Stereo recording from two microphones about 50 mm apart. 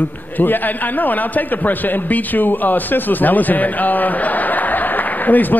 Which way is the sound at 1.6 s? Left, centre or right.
Left.